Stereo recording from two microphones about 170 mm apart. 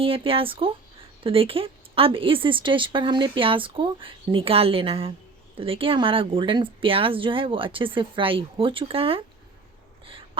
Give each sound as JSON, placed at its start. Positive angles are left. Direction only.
{"t": 0.0, "sound": "speech", "side_deg": -30}